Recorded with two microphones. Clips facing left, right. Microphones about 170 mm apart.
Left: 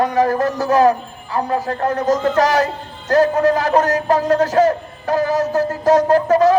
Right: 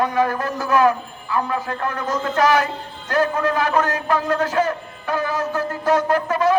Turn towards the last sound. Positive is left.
turn(degrees=40)  # may be behind; listen again after turning